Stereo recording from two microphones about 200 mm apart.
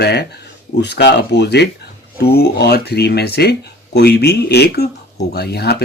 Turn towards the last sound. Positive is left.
turn(degrees=55)  # may be behind; listen again after turning